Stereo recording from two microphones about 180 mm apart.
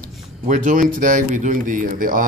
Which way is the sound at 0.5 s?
45° right (ahead or behind).